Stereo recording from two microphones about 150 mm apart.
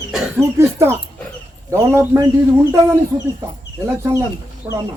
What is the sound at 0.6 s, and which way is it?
Speech, 15° right (ahead or behind).